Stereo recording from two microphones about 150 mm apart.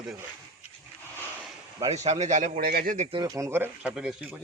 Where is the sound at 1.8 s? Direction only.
45° right (ahead or behind).